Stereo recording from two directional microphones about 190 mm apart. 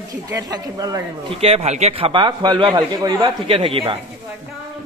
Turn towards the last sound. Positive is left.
turn(degrees=-30)  # may be behind; listen again after turning